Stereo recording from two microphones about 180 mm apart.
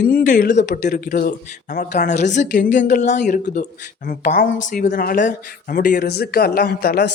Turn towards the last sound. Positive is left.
turn(degrees=60)  # may be behind; listen again after turning